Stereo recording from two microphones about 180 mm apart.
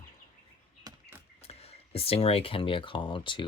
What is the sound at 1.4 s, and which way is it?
Speech, 35° left (ahead or behind).